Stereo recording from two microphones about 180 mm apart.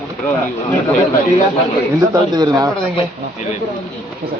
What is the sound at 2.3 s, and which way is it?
Speech, 20° right (ahead or behind).